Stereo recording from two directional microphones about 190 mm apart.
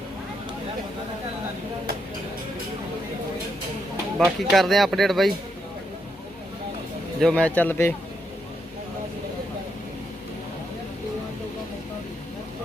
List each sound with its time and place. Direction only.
4.2 s speech: centre (ahead or behind)
7.2 s a man's voice: 5° left (ahead or behind)